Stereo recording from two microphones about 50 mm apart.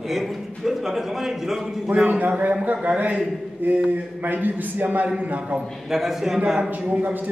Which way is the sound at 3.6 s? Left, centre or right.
Right.